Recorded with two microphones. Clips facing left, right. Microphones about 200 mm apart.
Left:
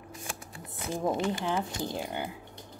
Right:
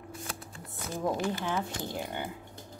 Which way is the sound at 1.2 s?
15° left (ahead or behind).